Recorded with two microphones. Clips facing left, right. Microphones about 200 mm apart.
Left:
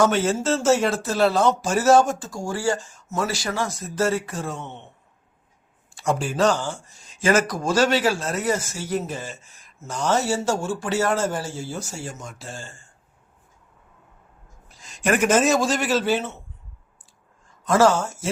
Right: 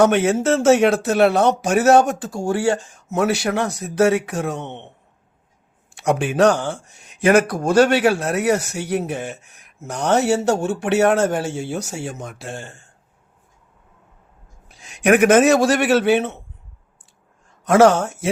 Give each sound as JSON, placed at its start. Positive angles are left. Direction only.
{"t": 0.0, "sound": "speech", "side_deg": -65}
{"t": 6.0, "sound": "speech", "side_deg": -70}
{"t": 14.7, "sound": "a man's voice", "side_deg": -65}
{"t": 17.6, "sound": "speech", "side_deg": -65}